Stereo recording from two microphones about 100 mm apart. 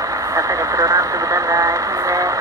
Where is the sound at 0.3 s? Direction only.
35° right (ahead or behind).